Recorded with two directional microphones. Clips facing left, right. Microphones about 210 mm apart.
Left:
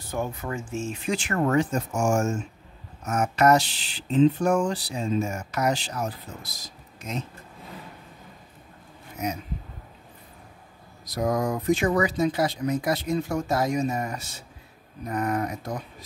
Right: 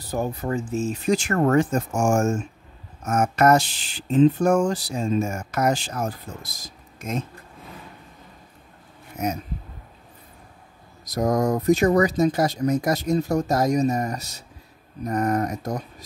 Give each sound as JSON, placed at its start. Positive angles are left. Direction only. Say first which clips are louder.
{"t": 0.0, "sound": "speech", "louder": "right 4 dB", "side_deg": -35}
{"t": 11.1, "sound": "speech", "louder": "right 4 dB", "side_deg": -45}